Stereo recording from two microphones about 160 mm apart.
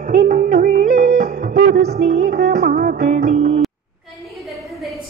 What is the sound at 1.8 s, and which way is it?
Music, 45° right (ahead or behind).